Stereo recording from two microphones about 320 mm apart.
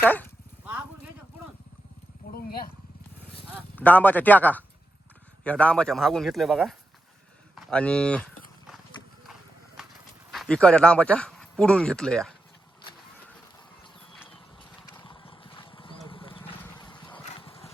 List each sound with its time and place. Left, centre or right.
0.0 s speech: centre
2.3 s a sound: left
3.8 s speech: centre
9.8 s horse: centre
10.3 s speech: centre
15.0 s vehicle: centre